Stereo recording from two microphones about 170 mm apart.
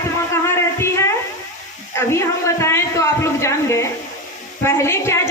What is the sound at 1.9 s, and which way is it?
A woman's voice, 15° left (ahead or behind).